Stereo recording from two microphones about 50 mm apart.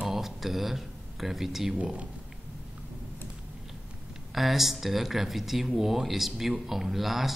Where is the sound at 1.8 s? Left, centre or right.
Right.